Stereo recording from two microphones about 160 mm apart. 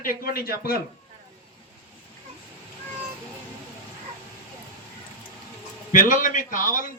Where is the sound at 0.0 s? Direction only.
65° left (ahead or behind).